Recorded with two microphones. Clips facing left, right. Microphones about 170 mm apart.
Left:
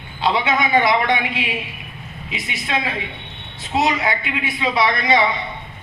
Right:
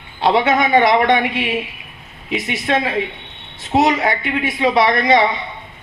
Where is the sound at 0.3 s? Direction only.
40° right (ahead or behind).